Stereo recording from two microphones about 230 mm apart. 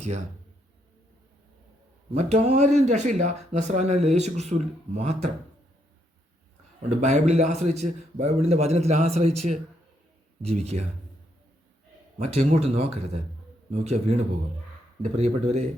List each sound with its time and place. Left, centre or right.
0.0 s speech: right
2.1 s speech: right
6.8 s speech: right
10.4 s speech: right
12.2 s speech: right